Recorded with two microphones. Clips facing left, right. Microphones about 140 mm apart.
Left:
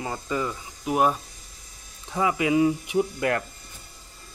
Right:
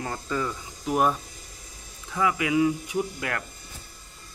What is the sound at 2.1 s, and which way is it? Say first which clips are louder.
Speech: left 2 dB; 30° left (ahead or behind).